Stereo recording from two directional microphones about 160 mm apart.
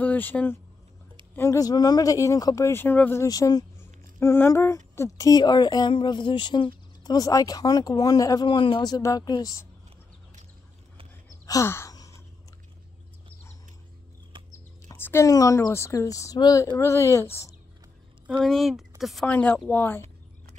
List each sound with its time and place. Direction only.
0.0 s speech: 10° left (ahead or behind)
3.3 s speech: 25° left (ahead or behind)
11.4 s sigh: 20° left (ahead or behind)
14.5 s speech: 15° left (ahead or behind)
18.4 s speech: centre (ahead or behind)